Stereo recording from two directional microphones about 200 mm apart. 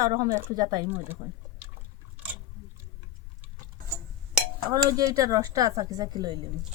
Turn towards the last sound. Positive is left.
turn(degrees=-20)  # may be behind; listen again after turning